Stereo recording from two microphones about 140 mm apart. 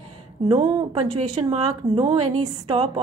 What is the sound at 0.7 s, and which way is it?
A woman's voice, 35° right (ahead or behind).